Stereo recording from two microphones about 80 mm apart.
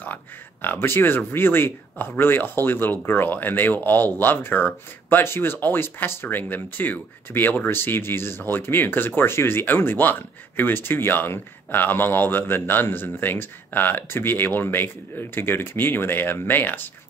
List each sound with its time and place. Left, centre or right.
0.0 s speech: left